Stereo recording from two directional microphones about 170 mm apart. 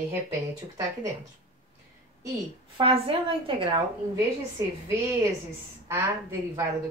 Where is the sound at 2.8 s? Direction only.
30° right (ahead or behind).